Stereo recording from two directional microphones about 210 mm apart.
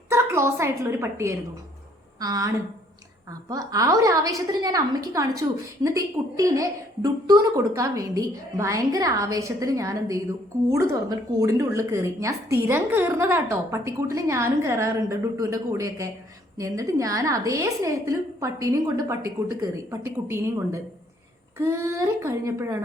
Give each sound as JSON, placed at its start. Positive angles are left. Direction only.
{"t": 0.1, "sound": "a woman's voice", "side_deg": -15}
{"t": 3.5, "sound": "a woman's voice", "side_deg": -15}